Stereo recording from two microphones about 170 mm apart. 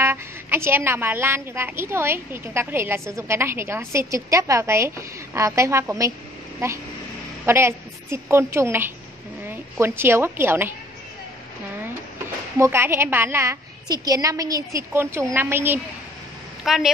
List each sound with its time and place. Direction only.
0.0 s a woman's voice: 15° right (ahead or behind)
12.5 s a woman's voice: 15° right (ahead or behind)
16.6 s speech: centre (ahead or behind)